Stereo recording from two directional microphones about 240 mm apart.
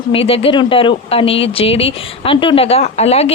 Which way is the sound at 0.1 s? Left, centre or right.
Left.